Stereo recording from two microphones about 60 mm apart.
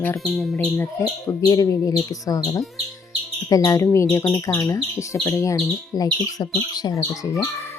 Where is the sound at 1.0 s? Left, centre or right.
Left.